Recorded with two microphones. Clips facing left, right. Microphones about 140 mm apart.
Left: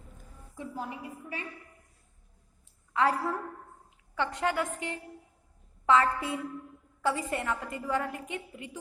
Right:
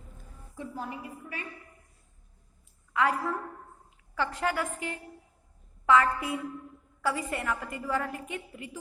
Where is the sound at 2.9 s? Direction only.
30° left (ahead or behind).